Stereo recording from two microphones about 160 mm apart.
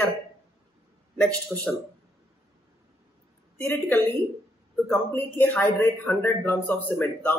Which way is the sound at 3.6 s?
10° left (ahead or behind).